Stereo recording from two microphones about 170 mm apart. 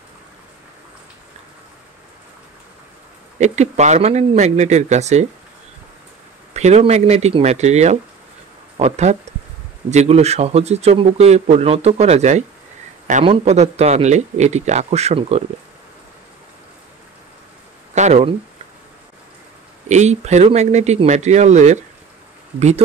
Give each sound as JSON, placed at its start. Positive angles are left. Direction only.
{"t": 3.3, "sound": "speech", "side_deg": -40}
{"t": 6.5, "sound": "speech", "side_deg": -40}
{"t": 17.9, "sound": "a sound", "side_deg": -40}
{"t": 19.9, "sound": "speech", "side_deg": -45}